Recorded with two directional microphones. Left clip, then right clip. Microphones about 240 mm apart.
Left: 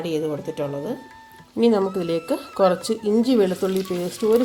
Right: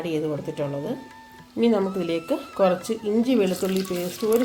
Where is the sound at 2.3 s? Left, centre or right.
Centre.